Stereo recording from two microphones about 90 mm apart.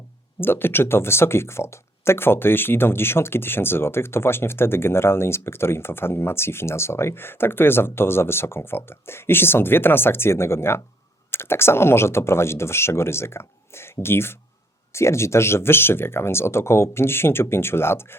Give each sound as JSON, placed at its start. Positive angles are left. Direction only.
{"t": 0.3, "sound": "speech", "side_deg": 25}